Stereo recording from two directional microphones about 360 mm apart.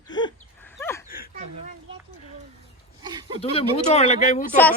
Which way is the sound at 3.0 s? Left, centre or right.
Centre.